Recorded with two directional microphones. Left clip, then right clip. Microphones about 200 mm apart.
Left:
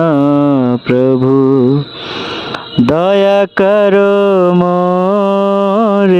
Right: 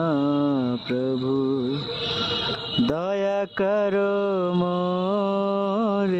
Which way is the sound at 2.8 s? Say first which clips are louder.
Left 17 dB; 45° left (ahead or behind).